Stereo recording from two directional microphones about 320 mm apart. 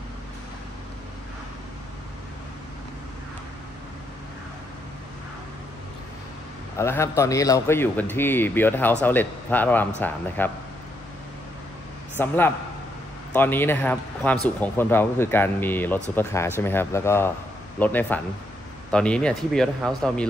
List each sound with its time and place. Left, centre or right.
6.8 s a man's voice: centre
12.2 s a man's voice: centre